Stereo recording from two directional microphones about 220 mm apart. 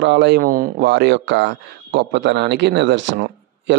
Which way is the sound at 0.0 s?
50° right (ahead or behind).